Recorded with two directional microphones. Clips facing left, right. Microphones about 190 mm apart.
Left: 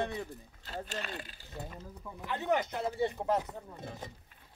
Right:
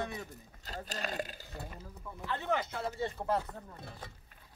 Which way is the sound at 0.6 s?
40° right (ahead or behind).